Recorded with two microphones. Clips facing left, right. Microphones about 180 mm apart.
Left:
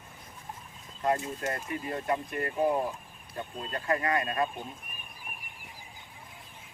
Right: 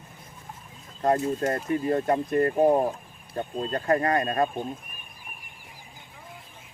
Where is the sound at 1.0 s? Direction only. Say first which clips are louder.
Right 6 dB; 40° right (ahead or behind).